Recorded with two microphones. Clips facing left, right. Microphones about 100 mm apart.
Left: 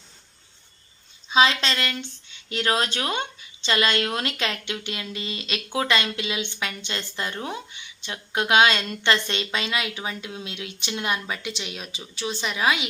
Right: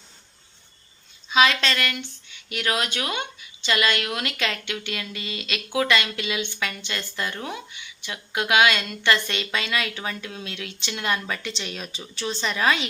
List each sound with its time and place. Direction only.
1.3 s speech: 25° left (ahead or behind)